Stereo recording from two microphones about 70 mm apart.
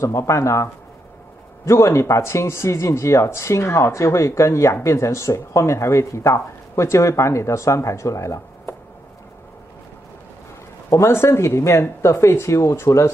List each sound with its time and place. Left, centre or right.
0.0 s speech: left
1.7 s speech: left
10.9 s speech: left